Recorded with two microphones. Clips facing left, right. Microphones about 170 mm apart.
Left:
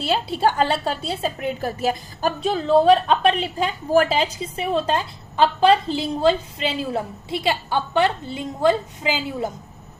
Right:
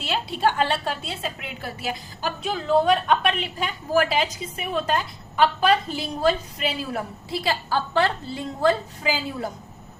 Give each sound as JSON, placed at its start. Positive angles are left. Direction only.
{"t": 0.0, "sound": "a woman's voice", "side_deg": 35}